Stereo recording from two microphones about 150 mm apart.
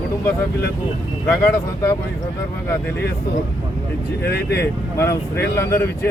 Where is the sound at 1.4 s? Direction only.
15° left (ahead or behind).